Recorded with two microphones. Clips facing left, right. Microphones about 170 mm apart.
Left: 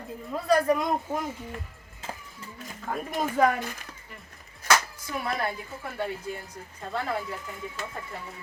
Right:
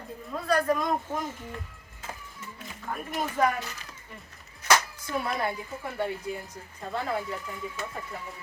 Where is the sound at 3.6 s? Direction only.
50° left (ahead or behind).